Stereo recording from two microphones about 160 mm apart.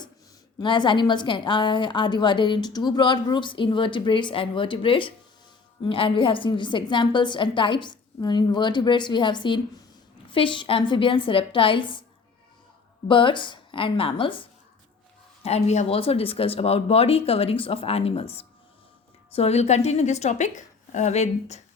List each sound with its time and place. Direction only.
0.6 s a woman's voice: 30° left (ahead or behind)
13.1 s speech: 30° left (ahead or behind)
15.4 s a woman's voice: 45° left (ahead or behind)